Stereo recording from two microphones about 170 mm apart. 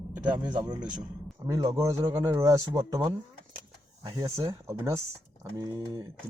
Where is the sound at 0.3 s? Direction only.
25° right (ahead or behind).